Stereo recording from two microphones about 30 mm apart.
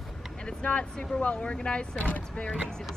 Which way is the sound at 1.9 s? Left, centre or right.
Left.